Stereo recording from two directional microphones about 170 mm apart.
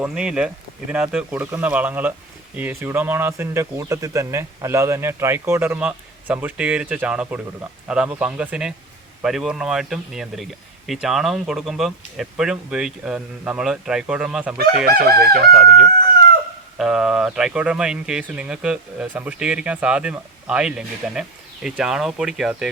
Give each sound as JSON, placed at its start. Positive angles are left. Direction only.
{"t": 0.0, "sound": "speech", "side_deg": -5}
{"t": 14.8, "sound": "crowing", "side_deg": -65}
{"t": 16.7, "sound": "speech", "side_deg": -5}